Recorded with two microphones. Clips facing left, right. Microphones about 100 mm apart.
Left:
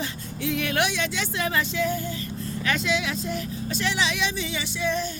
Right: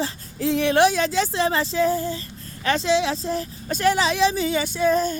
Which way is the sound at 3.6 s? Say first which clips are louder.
Right 7 dB; 45° right (ahead or behind).